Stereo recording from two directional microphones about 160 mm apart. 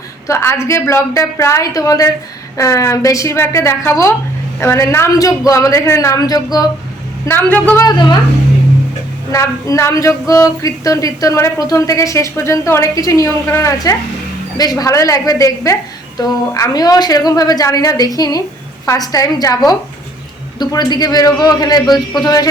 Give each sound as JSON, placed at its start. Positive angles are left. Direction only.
{"t": 0.3, "sound": "a woman's voice", "side_deg": 15}
{"t": 7.5, "sound": "a woman's voice", "side_deg": 10}
{"t": 7.8, "sound": "speech", "side_deg": 25}
{"t": 9.3, "sound": "speech", "side_deg": 20}